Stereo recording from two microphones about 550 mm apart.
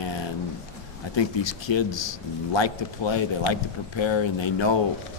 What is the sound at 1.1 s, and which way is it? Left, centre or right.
Speech, left.